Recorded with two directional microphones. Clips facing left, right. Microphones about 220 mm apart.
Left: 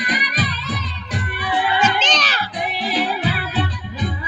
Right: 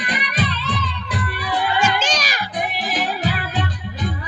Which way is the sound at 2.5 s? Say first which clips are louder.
Left 2 dB; 45° right (ahead or behind).